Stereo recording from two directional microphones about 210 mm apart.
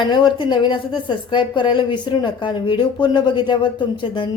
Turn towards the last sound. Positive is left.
turn(degrees=20)  # may be behind; listen again after turning